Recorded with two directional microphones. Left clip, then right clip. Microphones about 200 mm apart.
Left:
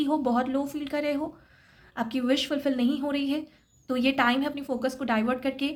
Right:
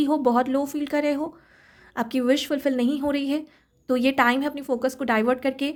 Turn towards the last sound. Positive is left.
turn(degrees=-40)  # may be behind; listen again after turning